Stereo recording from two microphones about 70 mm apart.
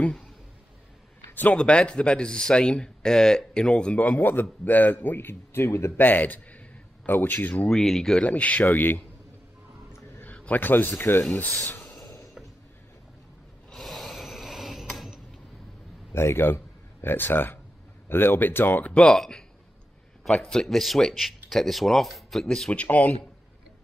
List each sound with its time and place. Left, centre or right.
1.3 s speech: left
1.6 s speech: centre; by 5.9 s left
5.9 s speech: left
7.7 s speech: centre
8.2 s speech: centre
10.2 s a sound: left
10.6 s speech: left
11.6 s a sound: left
13.7 s a sound: centre
16.1 s speech: left
19.0 s speech: centre
20.5 s speech: centre
22.5 s speech: centre